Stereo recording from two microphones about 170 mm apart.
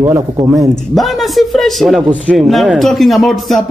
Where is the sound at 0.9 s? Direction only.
Centre (ahead or behind).